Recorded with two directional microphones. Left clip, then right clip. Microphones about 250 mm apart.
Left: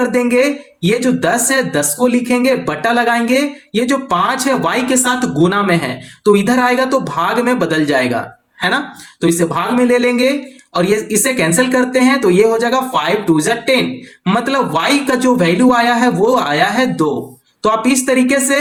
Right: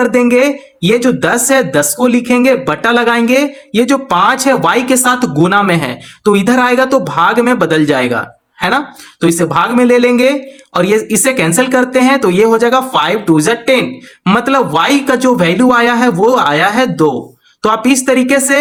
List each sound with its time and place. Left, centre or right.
0.1 s speech: right
9.2 s speech: right